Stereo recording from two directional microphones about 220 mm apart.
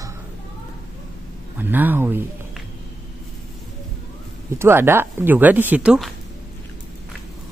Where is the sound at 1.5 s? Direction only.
10° right (ahead or behind).